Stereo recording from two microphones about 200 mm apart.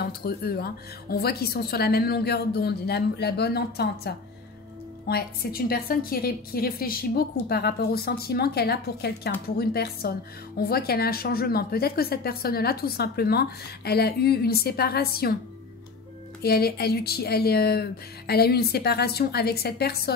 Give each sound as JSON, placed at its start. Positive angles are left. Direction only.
{"t": 0.0, "sound": "a woman's voice", "side_deg": 50}
{"t": 16.4, "sound": "a woman's voice", "side_deg": 50}